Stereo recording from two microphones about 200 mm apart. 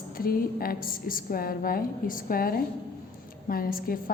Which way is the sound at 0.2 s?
45° left (ahead or behind).